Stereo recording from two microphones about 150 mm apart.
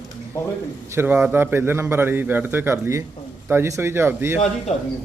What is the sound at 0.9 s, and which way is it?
A man's voice, 10° right (ahead or behind).